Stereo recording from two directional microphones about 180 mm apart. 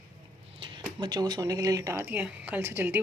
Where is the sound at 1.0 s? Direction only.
25° right (ahead or behind).